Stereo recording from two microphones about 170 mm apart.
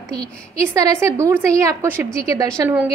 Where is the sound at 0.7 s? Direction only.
20° right (ahead or behind).